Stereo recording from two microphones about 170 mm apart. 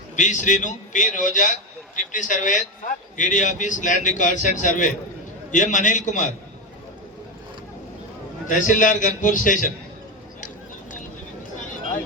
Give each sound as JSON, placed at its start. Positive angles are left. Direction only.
{"t": 0.2, "sound": "a man's voice", "side_deg": 45}
{"t": 8.4, "sound": "a man's voice", "side_deg": 50}